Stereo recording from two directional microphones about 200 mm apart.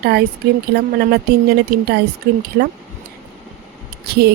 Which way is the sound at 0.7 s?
55° right (ahead or behind).